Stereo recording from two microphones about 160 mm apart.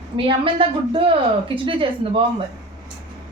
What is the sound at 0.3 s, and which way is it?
Speech, 35° right (ahead or behind).